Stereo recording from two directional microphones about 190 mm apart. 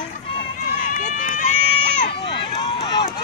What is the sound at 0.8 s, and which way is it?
Run, 40° left (ahead or behind).